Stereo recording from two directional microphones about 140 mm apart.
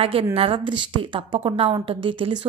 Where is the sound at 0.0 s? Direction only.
40° right (ahead or behind).